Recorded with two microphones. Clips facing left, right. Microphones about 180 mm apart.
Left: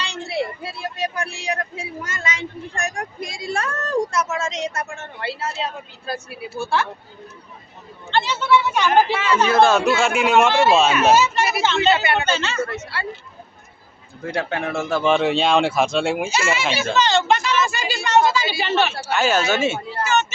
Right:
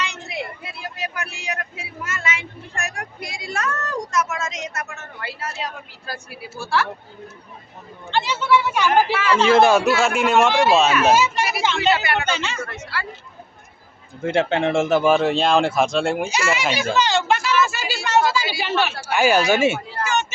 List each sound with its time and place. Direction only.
0.0 s speech: 30° left (ahead or behind)
8.1 s a woman's voice: 10° right (ahead or behind)
9.5 s speech: 20° right (ahead or behind)
10.0 s speech: centre (ahead or behind)
11.8 s speech: 25° left (ahead or behind)
12.3 s speech: 15° right (ahead or behind)
12.8 s speech: 25° left (ahead or behind)
14.3 s speech: 25° right (ahead or behind)
15.0 s speech: centre (ahead or behind)
16.6 s speech: 15° right (ahead or behind)
17.7 s a sound: 5° right (ahead or behind)
18.6 s speech: 10° right (ahead or behind)